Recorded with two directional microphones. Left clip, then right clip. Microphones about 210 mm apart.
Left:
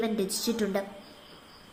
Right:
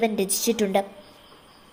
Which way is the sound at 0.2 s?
40° right (ahead or behind).